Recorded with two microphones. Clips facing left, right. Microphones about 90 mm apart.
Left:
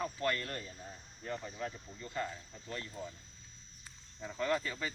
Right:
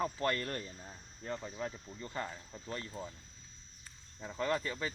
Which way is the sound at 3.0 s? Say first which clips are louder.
Even; 20° right (ahead or behind).